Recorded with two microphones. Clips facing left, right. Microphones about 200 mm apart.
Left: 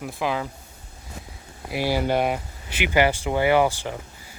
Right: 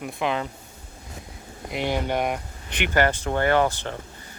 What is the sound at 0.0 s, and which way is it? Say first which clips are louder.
Speech: even; centre (ahead or behind).